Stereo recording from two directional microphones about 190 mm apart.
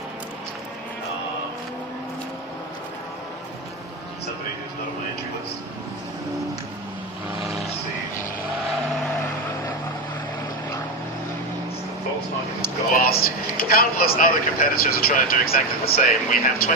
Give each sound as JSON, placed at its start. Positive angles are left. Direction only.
{"t": 12.9, "sound": "speech", "side_deg": 50}